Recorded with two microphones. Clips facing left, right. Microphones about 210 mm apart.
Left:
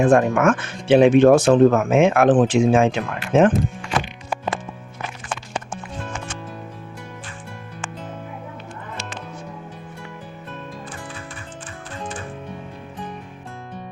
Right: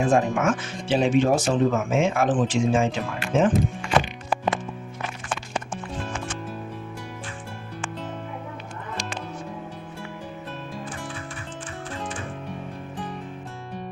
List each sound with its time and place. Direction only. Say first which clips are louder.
0.0 s speech: left 5 dB; 60° left (ahead or behind)